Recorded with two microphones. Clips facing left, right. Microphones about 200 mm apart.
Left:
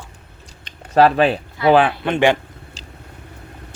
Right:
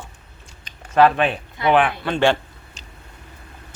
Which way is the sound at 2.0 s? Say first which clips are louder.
Left 2 dB; 15° left (ahead or behind).